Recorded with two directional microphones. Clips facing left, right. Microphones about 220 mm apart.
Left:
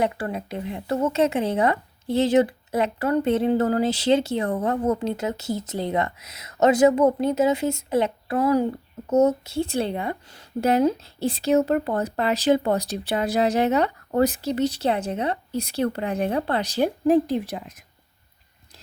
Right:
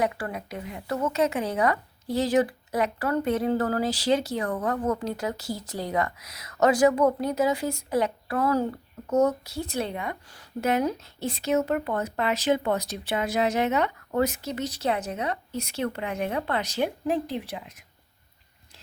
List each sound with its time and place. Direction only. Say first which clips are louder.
0.0 s a woman's voice: left 3 dB; 25° left (ahead or behind); by 17.8 s 40° left (ahead or behind)